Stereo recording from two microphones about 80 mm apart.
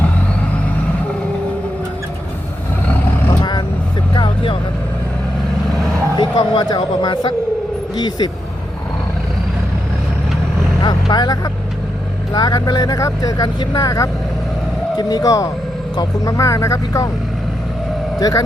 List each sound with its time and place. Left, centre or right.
4.1 s vehicle: left
6.1 s speech: left
7.9 s speech: left
10.8 s speech: left
18.2 s speech: left